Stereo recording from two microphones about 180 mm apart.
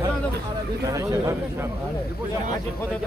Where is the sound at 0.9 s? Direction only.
20° right (ahead or behind).